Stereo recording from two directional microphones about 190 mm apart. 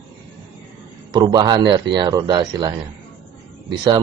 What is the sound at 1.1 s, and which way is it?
Speech, 20° right (ahead or behind).